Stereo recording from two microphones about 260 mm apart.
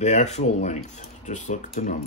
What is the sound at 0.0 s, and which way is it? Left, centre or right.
Speech, left.